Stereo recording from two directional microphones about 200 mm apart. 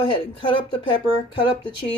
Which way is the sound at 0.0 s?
25° left (ahead or behind).